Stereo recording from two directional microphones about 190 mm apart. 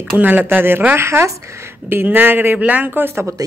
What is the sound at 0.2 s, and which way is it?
Speech, 10° right (ahead or behind).